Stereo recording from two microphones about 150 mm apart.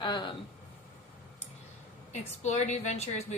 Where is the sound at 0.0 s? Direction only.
30° left (ahead or behind).